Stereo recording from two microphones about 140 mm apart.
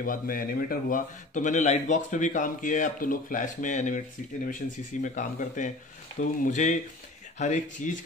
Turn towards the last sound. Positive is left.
turn(degrees=60)  # may be behind; listen again after turning